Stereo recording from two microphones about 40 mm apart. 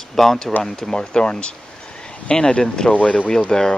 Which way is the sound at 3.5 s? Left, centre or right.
Centre.